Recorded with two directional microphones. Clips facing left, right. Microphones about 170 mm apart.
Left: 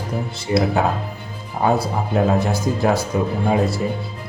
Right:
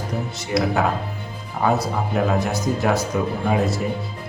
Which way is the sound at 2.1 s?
30° left (ahead or behind).